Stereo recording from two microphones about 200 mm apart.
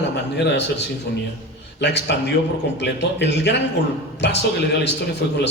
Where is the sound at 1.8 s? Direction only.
60° left (ahead or behind).